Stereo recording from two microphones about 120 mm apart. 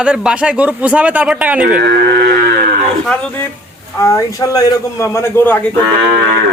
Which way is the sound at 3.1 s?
10° left (ahead or behind).